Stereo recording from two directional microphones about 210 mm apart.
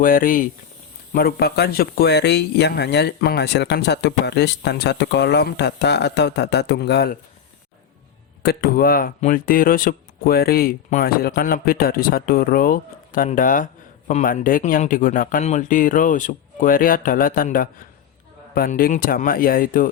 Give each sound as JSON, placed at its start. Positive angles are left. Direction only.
{"t": 0.0, "sound": "speech", "side_deg": 40}
{"t": 8.4, "sound": "speech", "side_deg": 45}